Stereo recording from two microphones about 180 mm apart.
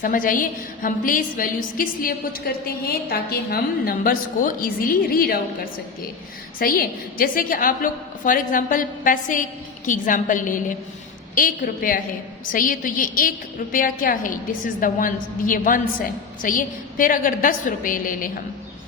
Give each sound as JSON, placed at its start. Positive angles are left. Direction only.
{"t": 0.0, "sound": "a woman's voice", "side_deg": 50}
{"t": 6.6, "sound": "a woman's voice", "side_deg": 55}